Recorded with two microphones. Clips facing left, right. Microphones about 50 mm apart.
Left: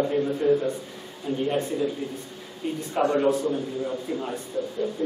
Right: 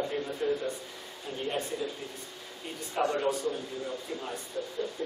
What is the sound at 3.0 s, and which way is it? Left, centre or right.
A man's voice, centre.